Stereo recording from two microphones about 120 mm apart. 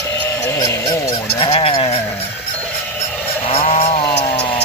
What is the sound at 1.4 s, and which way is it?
Honk, 50° left (ahead or behind).